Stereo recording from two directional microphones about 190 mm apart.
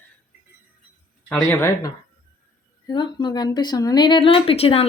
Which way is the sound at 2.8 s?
25° left (ahead or behind).